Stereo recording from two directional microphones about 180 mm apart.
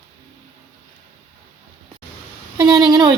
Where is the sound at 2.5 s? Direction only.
25° right (ahead or behind).